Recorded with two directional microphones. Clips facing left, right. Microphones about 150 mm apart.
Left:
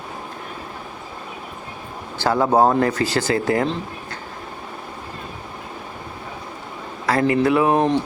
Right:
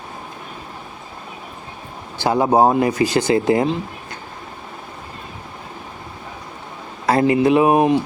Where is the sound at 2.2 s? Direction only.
15° right (ahead or behind).